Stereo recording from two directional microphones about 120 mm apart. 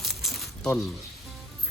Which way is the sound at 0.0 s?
Centre (ahead or behind).